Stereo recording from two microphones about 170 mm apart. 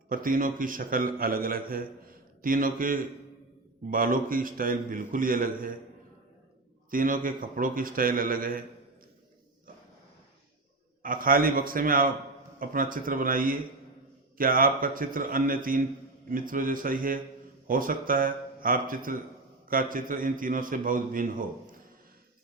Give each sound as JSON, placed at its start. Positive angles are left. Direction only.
{"t": 0.1, "sound": "a man's voice", "side_deg": -55}
{"t": 6.9, "sound": "a man's voice", "side_deg": -55}
{"t": 11.0, "sound": "a man's voice", "side_deg": -55}